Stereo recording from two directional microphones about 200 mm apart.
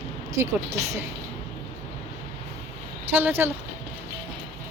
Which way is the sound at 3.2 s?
10° right (ahead or behind).